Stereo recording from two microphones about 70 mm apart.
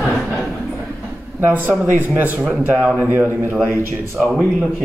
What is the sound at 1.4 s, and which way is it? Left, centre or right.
Speech, right.